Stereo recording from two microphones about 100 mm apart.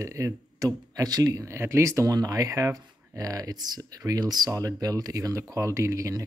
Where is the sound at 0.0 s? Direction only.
30° right (ahead or behind).